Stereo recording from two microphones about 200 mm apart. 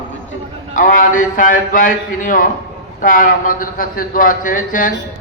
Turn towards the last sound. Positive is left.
turn(degrees=40)  # may be behind; listen again after turning